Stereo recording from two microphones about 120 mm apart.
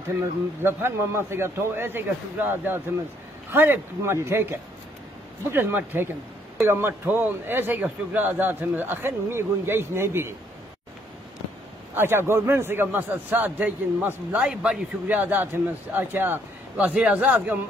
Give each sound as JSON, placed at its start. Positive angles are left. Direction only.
{"t": 0.6, "sound": "a man's voice", "side_deg": -20}
{"t": 11.9, "sound": "a man's voice", "side_deg": -20}